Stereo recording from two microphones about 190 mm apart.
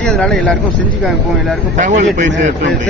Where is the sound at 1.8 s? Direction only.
40° right (ahead or behind).